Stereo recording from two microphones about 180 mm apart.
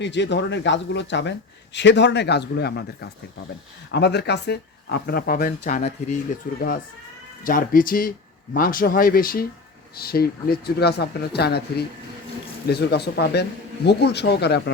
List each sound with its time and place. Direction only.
0.0 s a man's voice: 75° left (ahead or behind); by 6.1 s 45° left (ahead or behind)
7.4 s a man's voice: 50° left (ahead or behind); by 14.7 s 70° left (ahead or behind)